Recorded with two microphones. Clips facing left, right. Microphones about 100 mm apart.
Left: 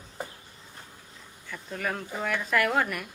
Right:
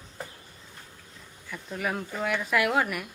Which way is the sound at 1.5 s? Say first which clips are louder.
Right 1 dB; 5° right (ahead or behind).